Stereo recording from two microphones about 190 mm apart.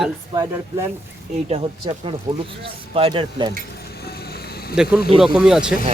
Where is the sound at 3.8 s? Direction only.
55° left (ahead or behind).